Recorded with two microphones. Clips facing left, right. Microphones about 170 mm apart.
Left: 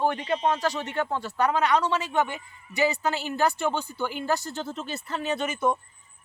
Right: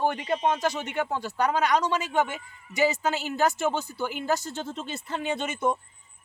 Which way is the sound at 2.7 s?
15° right (ahead or behind).